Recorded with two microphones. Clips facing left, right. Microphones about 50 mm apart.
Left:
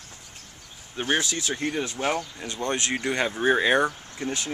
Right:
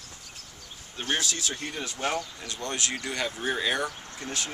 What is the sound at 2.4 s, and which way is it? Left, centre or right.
Speech, left.